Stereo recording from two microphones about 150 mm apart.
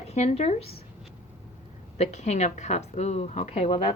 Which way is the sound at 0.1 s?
45° left (ahead or behind).